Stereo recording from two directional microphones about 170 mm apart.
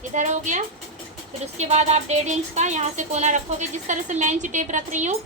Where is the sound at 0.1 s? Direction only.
45° right (ahead or behind).